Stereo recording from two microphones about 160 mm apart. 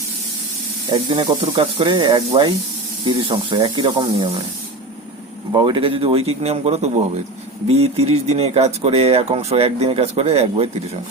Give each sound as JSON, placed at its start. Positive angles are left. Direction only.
{"t": 0.9, "sound": "speech", "side_deg": -35}
{"t": 5.5, "sound": "speech", "side_deg": -30}